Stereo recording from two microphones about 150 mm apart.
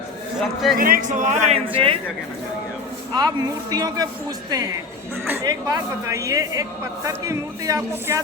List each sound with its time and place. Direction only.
0.8 s a woman's voice: 65° right (ahead or behind); by 2.0 s 40° right (ahead or behind)
3.2 s speech: 25° right (ahead or behind)